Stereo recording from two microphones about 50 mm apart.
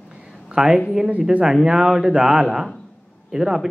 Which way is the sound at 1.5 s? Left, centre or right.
Centre.